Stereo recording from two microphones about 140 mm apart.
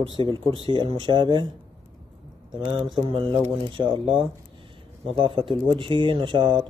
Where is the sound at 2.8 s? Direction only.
35° right (ahead or behind).